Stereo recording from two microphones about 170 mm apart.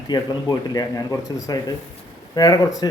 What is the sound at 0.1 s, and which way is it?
A man's voice, 25° left (ahead or behind).